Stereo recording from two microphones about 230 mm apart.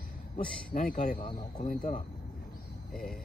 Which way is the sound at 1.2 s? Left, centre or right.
Left.